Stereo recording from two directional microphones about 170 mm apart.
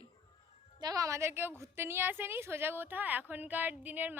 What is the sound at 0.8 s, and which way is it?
Speech, 20° right (ahead or behind).